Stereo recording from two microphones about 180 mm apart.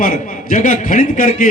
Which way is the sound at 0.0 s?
45° left (ahead or behind).